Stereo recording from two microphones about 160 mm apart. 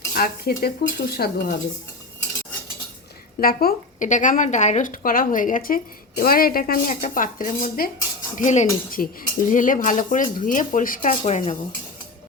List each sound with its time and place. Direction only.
0.1 s dishes: 65° left (ahead or behind)
3.4 s a woman's voice: 65° left (ahead or behind); by 11.5 s 45° left (ahead or behind)